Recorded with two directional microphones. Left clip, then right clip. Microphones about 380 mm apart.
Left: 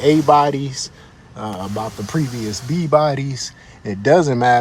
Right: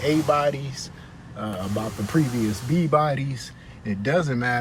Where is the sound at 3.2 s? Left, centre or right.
Centre.